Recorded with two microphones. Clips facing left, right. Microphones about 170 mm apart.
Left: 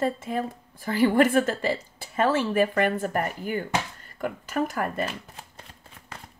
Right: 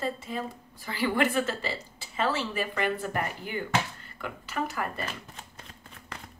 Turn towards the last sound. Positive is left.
turn(degrees=50)  # may be behind; listen again after turning